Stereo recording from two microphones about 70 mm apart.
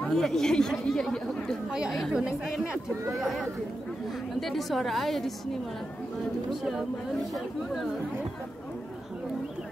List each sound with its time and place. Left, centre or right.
0.1 s speech: centre
1.7 s speech: centre
6.5 s speech: centre